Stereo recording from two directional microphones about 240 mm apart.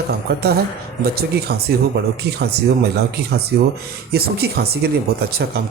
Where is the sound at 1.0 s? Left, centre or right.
Right.